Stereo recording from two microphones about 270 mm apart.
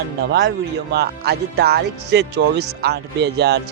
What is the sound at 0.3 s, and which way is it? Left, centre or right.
Speech, right.